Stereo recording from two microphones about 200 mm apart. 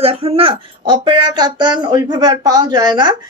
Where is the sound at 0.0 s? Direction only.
30° right (ahead or behind).